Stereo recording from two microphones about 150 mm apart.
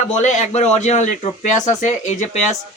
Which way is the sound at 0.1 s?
50° left (ahead or behind).